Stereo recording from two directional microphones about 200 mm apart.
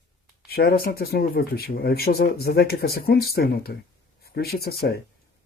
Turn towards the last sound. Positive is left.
turn(degrees=55)  # may be behind; listen again after turning